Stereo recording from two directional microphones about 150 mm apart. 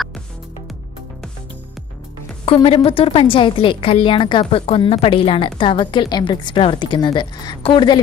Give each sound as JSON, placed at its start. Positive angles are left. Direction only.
{"t": 2.5, "sound": "a woman's voice", "side_deg": 40}